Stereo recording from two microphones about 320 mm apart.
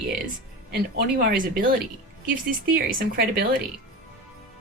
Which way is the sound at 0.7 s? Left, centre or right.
Right.